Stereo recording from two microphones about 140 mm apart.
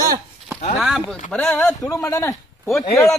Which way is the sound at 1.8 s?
20° left (ahead or behind).